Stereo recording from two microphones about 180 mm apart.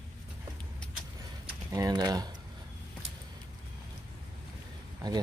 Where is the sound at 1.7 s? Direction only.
20° right (ahead or behind).